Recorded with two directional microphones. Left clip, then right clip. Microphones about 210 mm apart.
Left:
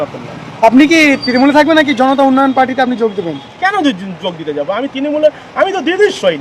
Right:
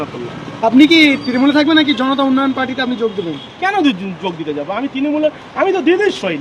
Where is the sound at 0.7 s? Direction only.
50° left (ahead or behind).